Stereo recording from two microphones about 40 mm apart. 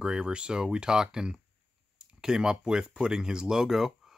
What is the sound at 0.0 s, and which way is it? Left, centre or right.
Speech, centre.